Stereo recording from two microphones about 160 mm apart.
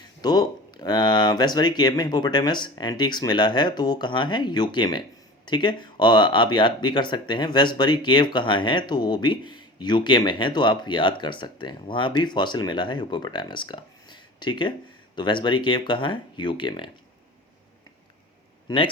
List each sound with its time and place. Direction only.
0.2 s speech: 25° left (ahead or behind)